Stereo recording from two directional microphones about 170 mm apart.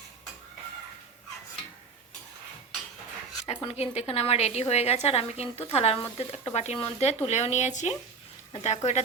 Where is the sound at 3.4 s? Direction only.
35° left (ahead or behind).